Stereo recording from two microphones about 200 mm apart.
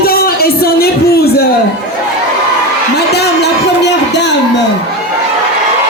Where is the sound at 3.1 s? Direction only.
55° left (ahead or behind).